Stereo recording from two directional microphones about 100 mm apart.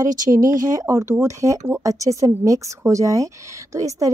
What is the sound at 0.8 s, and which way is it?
Speech, 25° right (ahead or behind).